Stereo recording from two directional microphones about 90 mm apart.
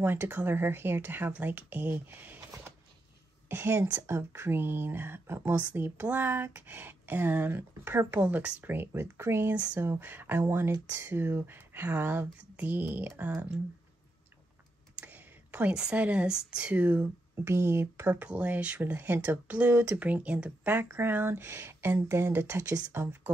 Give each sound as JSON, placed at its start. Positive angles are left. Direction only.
{"t": 0.0, "sound": "speech", "side_deg": -25}
{"t": 3.4, "sound": "speech", "side_deg": -25}
{"t": 8.2, "sound": "speech", "side_deg": -15}
{"t": 15.0, "sound": "a sound", "side_deg": -15}
{"t": 15.8, "sound": "speech", "side_deg": -10}
{"t": 17.5, "sound": "speech", "side_deg": -30}